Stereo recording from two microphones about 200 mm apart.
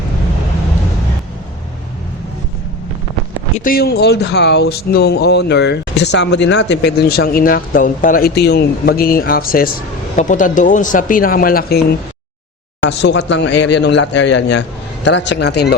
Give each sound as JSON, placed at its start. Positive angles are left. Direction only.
{"t": 3.6, "sound": "speech", "side_deg": 50}
{"t": 13.0, "sound": "a man's voice", "side_deg": 60}